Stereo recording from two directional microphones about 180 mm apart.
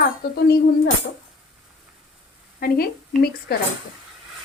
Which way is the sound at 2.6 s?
60° left (ahead or behind).